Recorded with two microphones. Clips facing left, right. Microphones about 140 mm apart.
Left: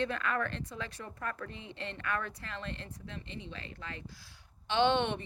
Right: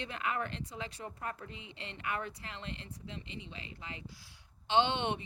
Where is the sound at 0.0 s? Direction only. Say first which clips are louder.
Left 4 dB; 20° right (ahead or behind).